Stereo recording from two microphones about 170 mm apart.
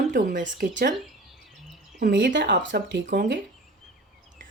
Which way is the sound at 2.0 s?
80° right.